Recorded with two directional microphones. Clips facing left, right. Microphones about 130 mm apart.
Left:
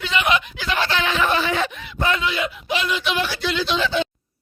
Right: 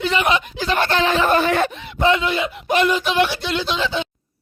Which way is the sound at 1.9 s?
25° right (ahead or behind).